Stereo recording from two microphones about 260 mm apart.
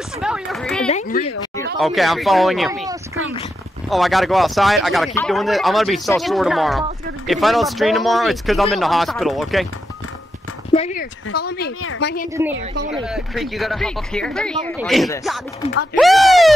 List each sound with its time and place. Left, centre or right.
0.2 s speech: centre
0.8 s speech: left
1.8 s speech: centre
3.9 s speech: centre
10.7 s speech: left
11.3 s speech: left
11.8 s a woman's voice: left
12.4 s a woman's voice: centre